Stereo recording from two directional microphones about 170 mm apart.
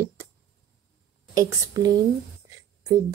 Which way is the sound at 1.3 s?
20° right (ahead or behind).